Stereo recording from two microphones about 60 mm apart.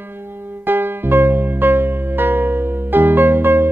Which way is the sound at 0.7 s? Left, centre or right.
Right.